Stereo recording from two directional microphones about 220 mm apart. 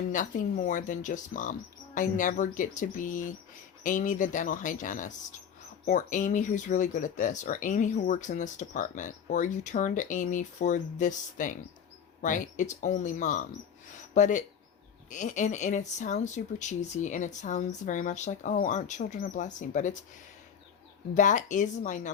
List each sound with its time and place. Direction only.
0.1 s speech: 35° left (ahead or behind)
21.2 s speech: 35° left (ahead or behind)